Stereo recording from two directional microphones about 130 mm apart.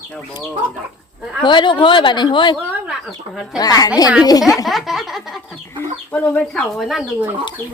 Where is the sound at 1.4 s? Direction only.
35° left (ahead or behind).